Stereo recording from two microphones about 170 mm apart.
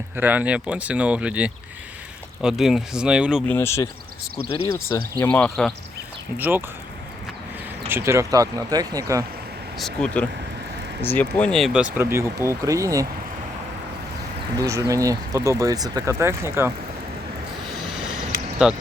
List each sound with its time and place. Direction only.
0.2 s speech: 10° right (ahead or behind)
3.4 s speech: 10° left (ahead or behind)
5.2 s speech: 10° left (ahead or behind)
6.3 s speech: 10° right (ahead or behind)
7.9 s speech: 15° right (ahead or behind)
9.7 s speech: 5° left (ahead or behind); by 13.1 s 20° right (ahead or behind)
14.5 s speech: 20° right (ahead or behind)
18.6 s speech: 5° right (ahead or behind)